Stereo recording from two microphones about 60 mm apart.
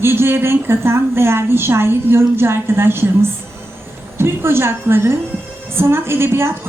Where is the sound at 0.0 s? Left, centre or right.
Right.